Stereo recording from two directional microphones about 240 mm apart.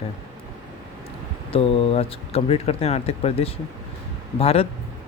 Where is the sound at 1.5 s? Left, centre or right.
Left.